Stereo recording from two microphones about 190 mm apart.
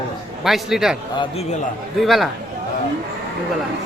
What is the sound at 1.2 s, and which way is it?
Speech, 35° left (ahead or behind).